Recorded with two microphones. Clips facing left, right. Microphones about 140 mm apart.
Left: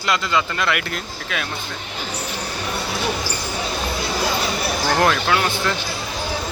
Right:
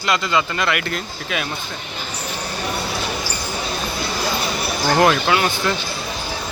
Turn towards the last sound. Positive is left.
turn(degrees=-5)  # may be behind; listen again after turning